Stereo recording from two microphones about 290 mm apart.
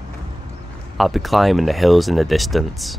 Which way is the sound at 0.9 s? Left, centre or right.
Centre.